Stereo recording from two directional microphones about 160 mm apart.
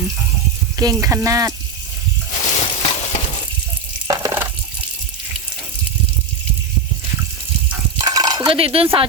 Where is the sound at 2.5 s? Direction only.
45° left (ahead or behind).